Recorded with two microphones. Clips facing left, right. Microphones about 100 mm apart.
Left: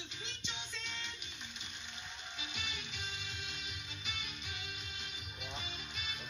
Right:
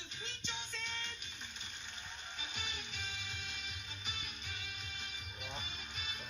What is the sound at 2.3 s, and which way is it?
Music, 45° right (ahead or behind).